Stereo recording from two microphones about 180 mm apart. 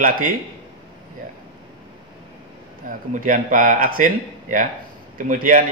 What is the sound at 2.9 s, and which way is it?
Speech, 50° right (ahead or behind).